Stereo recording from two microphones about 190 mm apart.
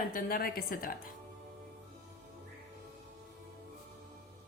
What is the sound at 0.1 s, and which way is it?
Speech, 50° left (ahead or behind).